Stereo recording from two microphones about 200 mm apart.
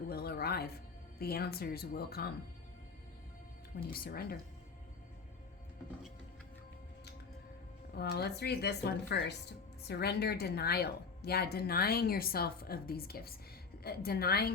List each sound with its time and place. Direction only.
0.1 s music: 50° left (ahead or behind)
1.2 s speech: 50° left (ahead or behind)
3.9 s speech: 50° left (ahead or behind)
7.9 s speech: 55° left (ahead or behind)